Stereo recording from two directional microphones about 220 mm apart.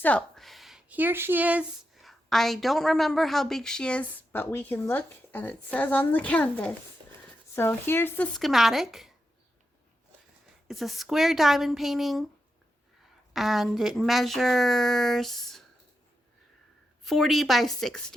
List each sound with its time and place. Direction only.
0.0 s speech: 5° left (ahead or behind)
7.0 s a sound: 20° right (ahead or behind)
7.5 s speech: 10° left (ahead or behind)
10.7 s speech: centre (ahead or behind)
13.3 s speech: centre (ahead or behind)
17.0 s speech: centre (ahead or behind)